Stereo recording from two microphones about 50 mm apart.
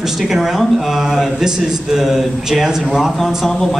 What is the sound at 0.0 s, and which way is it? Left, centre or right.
Speech, centre.